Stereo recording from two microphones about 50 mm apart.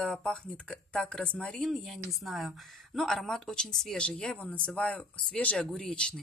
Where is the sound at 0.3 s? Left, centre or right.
Left.